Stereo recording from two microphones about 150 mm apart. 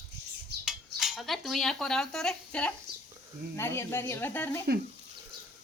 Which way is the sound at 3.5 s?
15° left (ahead or behind).